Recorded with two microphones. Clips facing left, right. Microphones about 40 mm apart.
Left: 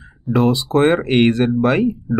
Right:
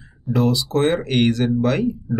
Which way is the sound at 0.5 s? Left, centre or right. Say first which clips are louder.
Left 5 dB; left.